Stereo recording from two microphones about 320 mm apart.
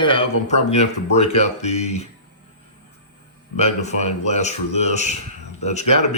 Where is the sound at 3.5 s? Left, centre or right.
Left.